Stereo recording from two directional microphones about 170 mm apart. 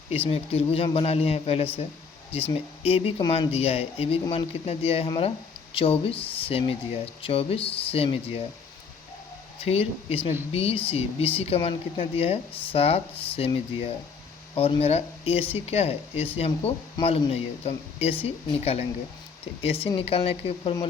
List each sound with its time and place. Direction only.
0.3 s speech: 35° left (ahead or behind)
9.6 s speech: 35° left (ahead or behind)